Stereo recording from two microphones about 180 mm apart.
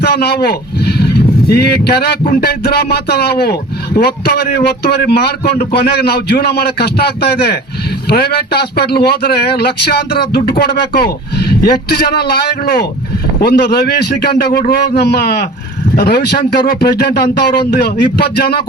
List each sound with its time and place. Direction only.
0.0 s speech: 65° left (ahead or behind)